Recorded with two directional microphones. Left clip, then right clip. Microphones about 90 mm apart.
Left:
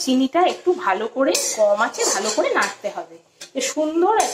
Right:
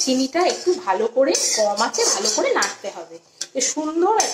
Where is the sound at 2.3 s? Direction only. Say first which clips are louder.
Even; 30° left (ahead or behind).